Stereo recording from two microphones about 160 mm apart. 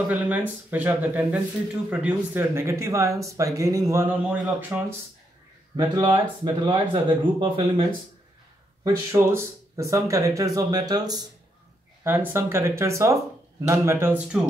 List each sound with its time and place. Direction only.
0.1 s speech: 10° right (ahead or behind)
5.8 s speech: 25° right (ahead or behind)
9.1 s speech: 15° right (ahead or behind)
12.0 s speech: 15° right (ahead or behind)